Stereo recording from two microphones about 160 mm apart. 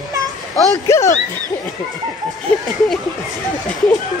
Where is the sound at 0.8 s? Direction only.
15° left (ahead or behind).